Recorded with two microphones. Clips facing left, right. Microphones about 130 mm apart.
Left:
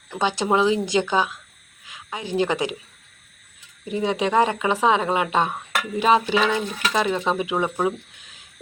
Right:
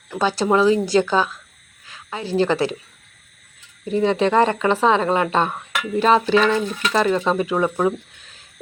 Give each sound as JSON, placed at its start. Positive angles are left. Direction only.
{"t": 0.1, "sound": "a woman's voice", "side_deg": 20}
{"t": 3.8, "sound": "speech", "side_deg": 10}